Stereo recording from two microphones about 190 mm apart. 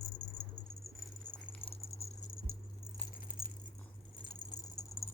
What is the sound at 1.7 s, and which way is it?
Patter, 30° left (ahead or behind).